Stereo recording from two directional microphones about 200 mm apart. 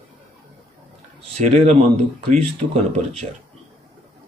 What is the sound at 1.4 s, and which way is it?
Speech, 30° right (ahead or behind).